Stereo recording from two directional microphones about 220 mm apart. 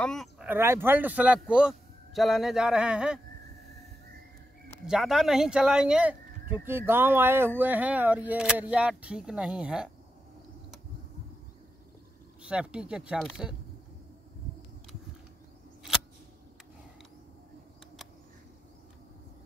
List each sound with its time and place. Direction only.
0.0 s speech: centre (ahead or behind)
4.8 s speech: centre (ahead or behind)
12.4 s speech: 5° right (ahead or behind)